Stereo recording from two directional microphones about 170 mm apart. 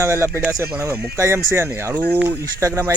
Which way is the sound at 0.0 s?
15° right (ahead or behind).